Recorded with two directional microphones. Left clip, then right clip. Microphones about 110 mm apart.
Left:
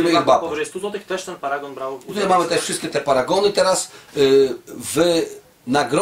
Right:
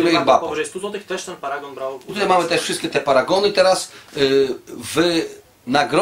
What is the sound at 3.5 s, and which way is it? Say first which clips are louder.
Speech: right 2 dB; 25° left (ahead or behind).